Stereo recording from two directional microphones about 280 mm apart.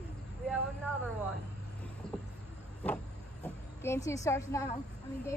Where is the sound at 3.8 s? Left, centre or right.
Centre.